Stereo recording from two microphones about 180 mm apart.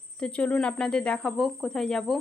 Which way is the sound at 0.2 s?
5° left (ahead or behind).